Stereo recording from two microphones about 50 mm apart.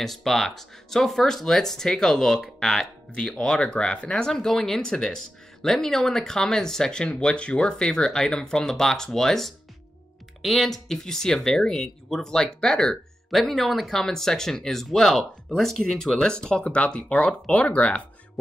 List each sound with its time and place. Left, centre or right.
0.0 s speech: centre; by 18.0 s left